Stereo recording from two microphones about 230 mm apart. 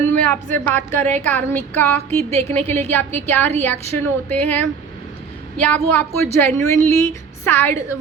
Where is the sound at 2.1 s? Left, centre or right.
Right.